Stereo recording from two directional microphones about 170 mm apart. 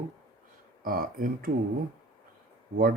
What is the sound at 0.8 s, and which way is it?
Speech, 55° right (ahead or behind).